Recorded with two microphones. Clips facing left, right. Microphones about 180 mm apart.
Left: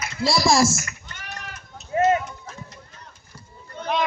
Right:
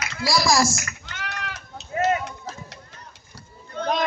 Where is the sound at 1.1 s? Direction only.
85° right.